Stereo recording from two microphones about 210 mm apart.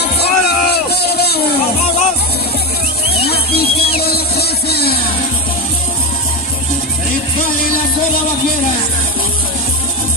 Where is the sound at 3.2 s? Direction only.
50° left (ahead or behind).